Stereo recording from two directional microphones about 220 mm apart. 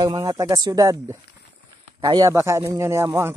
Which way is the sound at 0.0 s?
15° right (ahead or behind).